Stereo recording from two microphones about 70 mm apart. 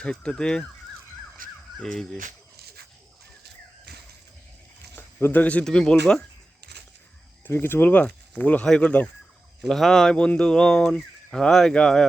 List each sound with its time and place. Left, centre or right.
0.0 s speech: centre
1.8 s speech: centre
4.9 s speech: left
5.6 s speech: centre
7.4 s speech: left
9.6 s speech: centre